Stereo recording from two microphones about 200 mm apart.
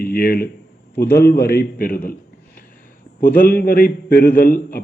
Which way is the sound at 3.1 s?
45° left (ahead or behind).